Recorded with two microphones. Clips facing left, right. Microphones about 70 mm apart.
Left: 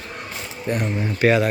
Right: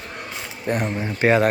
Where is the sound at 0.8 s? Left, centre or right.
Centre.